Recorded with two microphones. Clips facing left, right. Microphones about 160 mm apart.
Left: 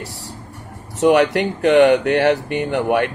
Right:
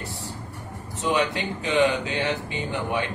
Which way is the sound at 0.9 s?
70° left (ahead or behind).